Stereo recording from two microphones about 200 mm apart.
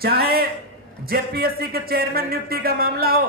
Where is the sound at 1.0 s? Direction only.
50° right (ahead or behind).